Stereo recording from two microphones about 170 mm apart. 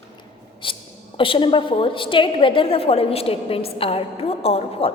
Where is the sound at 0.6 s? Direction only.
30° left (ahead or behind).